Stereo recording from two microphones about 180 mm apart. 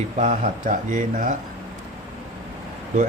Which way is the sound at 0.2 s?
45° right (ahead or behind).